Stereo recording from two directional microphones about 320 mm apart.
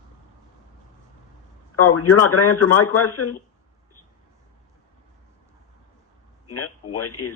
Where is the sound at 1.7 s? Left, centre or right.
Left.